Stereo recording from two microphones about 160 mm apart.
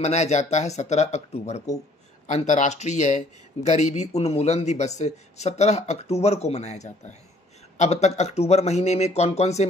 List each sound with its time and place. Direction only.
0.0 s speech: 45° left (ahead or behind)